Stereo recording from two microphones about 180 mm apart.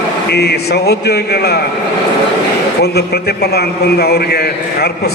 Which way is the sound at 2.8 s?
65° left (ahead or behind).